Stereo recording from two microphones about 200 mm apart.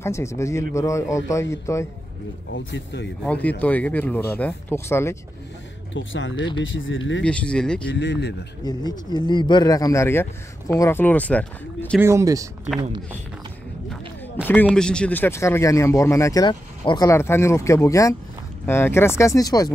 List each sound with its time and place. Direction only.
0.0 s speech: 15° left (ahead or behind)
2.5 s a man's voice: 60° left (ahead or behind)
3.3 s speech: 5° left (ahead or behind)
5.9 s speech: 70° left (ahead or behind)
7.2 s speech: 5° left (ahead or behind)
7.9 s a man's voice: 60° left (ahead or behind)
8.6 s speech: 20° left (ahead or behind)
12.0 s speech: 15° right (ahead or behind)
13.8 s a sound: 10° left (ahead or behind)
14.5 s speech: 5° left (ahead or behind)